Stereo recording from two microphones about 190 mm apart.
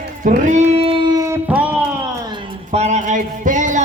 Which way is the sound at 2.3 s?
25° right (ahead or behind).